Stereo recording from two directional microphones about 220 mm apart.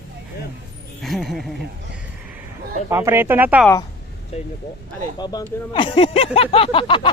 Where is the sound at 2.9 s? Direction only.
10° right (ahead or behind).